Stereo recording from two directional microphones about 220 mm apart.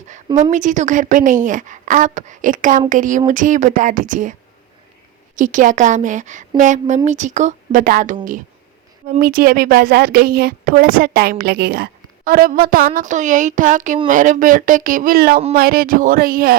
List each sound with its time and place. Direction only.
0.5 s a woman's voice: 35° right (ahead or behind)
5.4 s a woman's voice: 35° right (ahead or behind)